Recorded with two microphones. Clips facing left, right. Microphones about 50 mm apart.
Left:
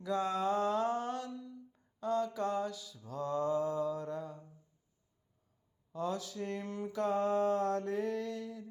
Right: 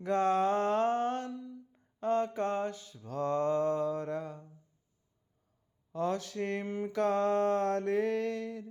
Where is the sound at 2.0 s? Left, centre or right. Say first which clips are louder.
Right 3 dB; right.